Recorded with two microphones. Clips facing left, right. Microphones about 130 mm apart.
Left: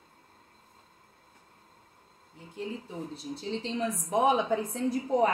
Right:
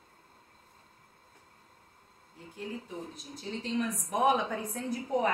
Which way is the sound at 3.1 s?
30° left (ahead or behind).